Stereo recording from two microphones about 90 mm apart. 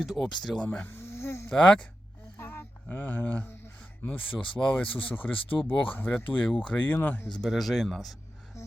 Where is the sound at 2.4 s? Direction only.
25° left (ahead or behind).